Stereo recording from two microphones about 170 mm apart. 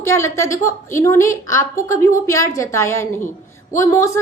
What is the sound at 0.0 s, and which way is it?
A woman's voice, 15° left (ahead or behind).